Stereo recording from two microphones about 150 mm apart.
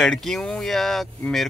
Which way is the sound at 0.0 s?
Centre (ahead or behind).